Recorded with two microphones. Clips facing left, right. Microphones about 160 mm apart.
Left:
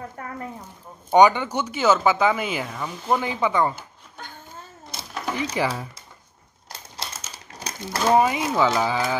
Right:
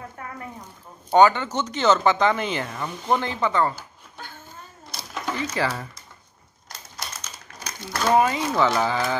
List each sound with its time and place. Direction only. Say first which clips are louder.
1.1 s speech: left 1 dB; 15° left (ahead or behind)
4.9 s a sound: left 1 dB; 15° left (ahead or behind)
7.0 s typewriter: left 1 dB; 30° left (ahead or behind)
7.8 s speech: left 1 dB; 15° left (ahead or behind)